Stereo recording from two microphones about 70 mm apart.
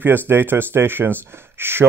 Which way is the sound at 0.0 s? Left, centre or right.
Right.